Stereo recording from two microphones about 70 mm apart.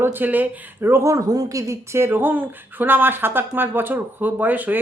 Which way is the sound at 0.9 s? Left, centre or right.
Right.